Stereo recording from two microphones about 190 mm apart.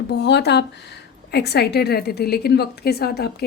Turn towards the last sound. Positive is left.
turn(degrees=55)  # may be behind; listen again after turning